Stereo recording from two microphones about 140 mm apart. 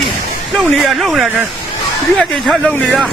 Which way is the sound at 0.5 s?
Centre (ahead or behind).